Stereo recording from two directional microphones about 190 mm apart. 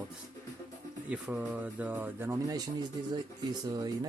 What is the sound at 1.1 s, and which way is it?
Speech, 5° right (ahead or behind).